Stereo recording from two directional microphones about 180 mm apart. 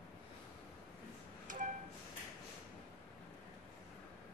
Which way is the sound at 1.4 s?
45° right (ahead or behind).